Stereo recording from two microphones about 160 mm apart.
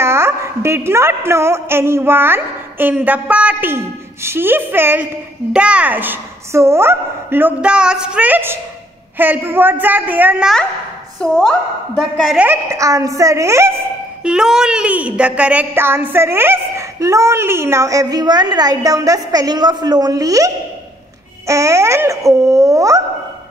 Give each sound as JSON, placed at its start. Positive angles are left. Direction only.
{"t": 0.0, "sound": "a woman's voice", "side_deg": -15}
{"t": 11.1, "sound": "a woman's voice", "side_deg": 0}
{"t": 12.4, "sound": "speech", "side_deg": -20}
{"t": 14.2, "sound": "a woman's voice", "side_deg": -5}